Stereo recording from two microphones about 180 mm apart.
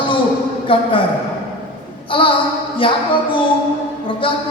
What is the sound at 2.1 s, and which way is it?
Speech, 30° left (ahead or behind).